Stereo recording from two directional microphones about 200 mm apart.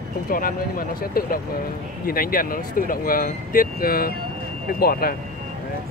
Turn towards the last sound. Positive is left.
turn(degrees=50)  # may be behind; listen again after turning